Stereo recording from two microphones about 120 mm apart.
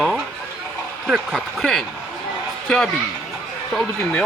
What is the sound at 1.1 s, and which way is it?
A man's voice, centre (ahead or behind).